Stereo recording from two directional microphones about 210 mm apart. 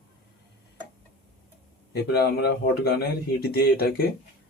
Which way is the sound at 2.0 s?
50° left (ahead or behind).